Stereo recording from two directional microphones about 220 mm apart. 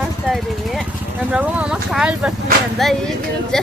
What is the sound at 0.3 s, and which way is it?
Vehicle, centre (ahead or behind).